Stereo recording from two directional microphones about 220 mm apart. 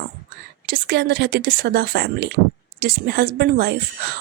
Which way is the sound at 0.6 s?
45° right (ahead or behind).